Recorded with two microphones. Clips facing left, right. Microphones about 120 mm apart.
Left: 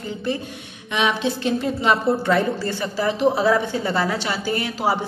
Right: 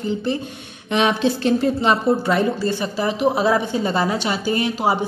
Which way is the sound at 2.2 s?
15° right (ahead or behind).